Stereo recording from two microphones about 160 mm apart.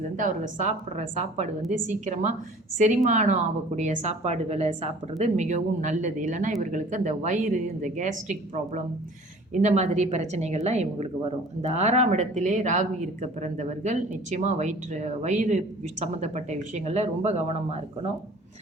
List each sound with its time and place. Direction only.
0.2 s speech: 50° right (ahead or behind)